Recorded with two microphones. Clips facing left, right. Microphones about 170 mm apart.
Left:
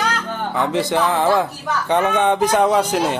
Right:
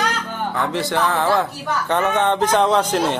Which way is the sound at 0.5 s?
15° left (ahead or behind).